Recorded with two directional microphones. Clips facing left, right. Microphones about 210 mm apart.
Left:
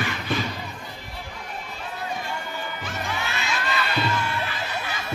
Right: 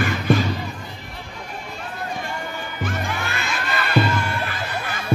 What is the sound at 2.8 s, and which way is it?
Music, 55° right (ahead or behind).